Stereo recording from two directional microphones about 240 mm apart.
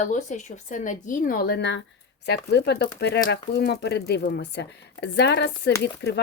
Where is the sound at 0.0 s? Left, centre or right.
Left.